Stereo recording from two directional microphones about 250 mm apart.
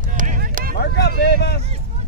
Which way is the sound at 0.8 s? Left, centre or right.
Left.